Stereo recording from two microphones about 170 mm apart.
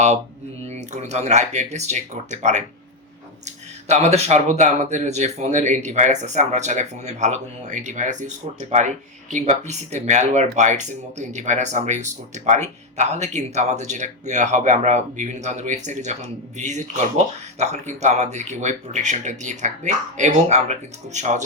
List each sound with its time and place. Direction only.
0.7 s speech: 40° right (ahead or behind)